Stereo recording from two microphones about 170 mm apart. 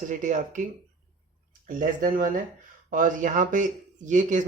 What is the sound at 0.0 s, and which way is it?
Speech, 50° right (ahead or behind).